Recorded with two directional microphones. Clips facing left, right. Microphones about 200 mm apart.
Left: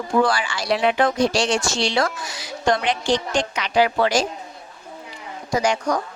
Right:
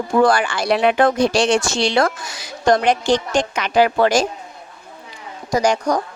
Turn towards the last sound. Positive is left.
turn(degrees=-40)  # may be behind; listen again after turning